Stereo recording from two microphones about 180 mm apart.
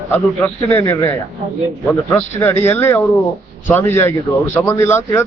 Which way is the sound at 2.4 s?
10° left (ahead or behind).